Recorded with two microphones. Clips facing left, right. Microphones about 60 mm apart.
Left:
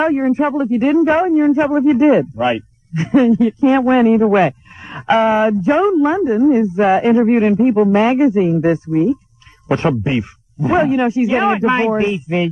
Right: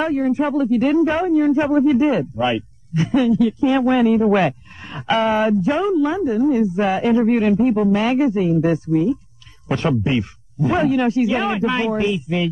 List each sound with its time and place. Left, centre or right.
0.0 s a man's voice: left